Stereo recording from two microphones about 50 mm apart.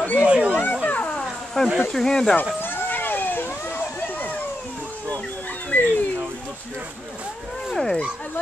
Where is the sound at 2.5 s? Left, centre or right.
Left.